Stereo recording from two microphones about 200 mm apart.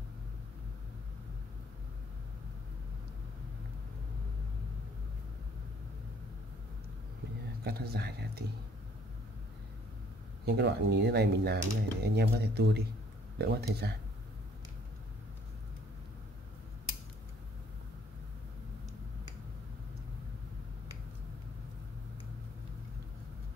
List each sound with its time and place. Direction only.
7.6 s speech: 50° right (ahead or behind)
10.4 s speech: 55° right (ahead or behind)